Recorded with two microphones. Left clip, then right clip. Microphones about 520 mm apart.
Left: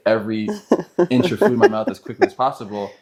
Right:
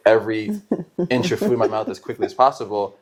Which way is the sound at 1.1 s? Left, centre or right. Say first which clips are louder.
Even; right.